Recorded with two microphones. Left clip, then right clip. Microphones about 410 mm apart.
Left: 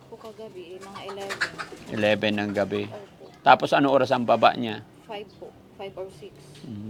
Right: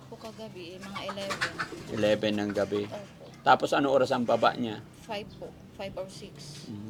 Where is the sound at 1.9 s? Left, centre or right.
Left.